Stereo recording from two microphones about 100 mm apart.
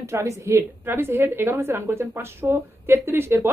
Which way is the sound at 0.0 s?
30° right (ahead or behind).